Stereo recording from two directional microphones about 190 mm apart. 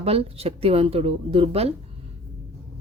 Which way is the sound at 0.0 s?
30° right (ahead or behind).